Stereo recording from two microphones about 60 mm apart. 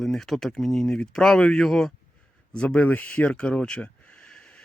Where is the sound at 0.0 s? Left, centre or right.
Centre.